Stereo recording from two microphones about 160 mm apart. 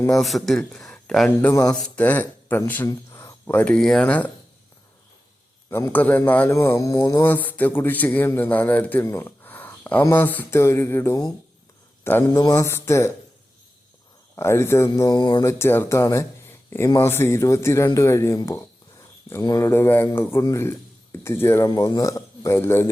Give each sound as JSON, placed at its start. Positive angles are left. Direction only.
{"t": 0.2, "sound": "a man's voice", "side_deg": 0}
{"t": 5.7, "sound": "a man's voice", "side_deg": 10}
{"t": 7.3, "sound": "a man's voice", "side_deg": 10}
{"t": 14.3, "sound": "a man's voice", "side_deg": 15}
{"t": 21.7, "sound": "a man's voice", "side_deg": 25}